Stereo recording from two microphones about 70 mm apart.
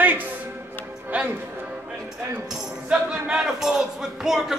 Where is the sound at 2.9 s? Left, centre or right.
Centre.